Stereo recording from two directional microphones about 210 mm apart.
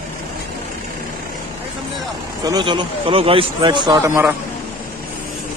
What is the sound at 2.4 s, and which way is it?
Speech, 20° right (ahead or behind).